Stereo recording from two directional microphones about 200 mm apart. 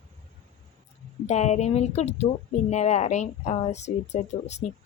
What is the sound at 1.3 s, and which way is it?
Speech, 35° left (ahead or behind).